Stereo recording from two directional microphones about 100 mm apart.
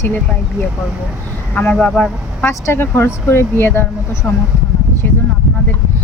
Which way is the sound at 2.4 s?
25° left (ahead or behind).